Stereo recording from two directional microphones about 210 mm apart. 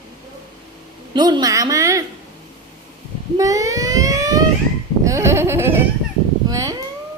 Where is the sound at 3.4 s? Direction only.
15° right (ahead or behind).